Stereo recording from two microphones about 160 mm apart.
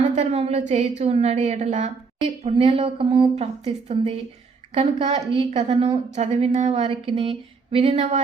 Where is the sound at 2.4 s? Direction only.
35° right (ahead or behind).